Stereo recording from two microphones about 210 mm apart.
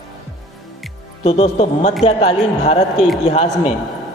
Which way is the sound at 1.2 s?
30° left (ahead or behind).